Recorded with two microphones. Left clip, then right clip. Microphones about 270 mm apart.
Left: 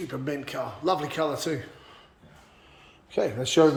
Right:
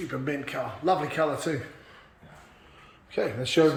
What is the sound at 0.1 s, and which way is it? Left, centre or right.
Speech, centre.